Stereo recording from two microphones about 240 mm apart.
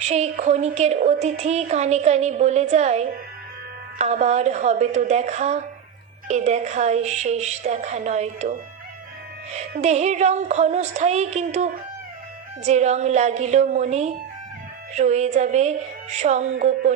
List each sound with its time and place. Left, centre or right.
0.1 s a woman's voice: right
9.8 s a woman's voice: right